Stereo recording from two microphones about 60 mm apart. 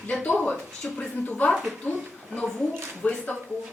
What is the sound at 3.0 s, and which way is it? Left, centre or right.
Speech, left.